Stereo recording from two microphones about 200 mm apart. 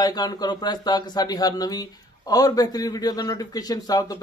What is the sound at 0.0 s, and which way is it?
Speech, 20° left (ahead or behind).